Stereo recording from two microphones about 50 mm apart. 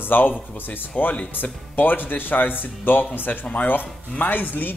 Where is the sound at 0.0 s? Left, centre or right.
Left.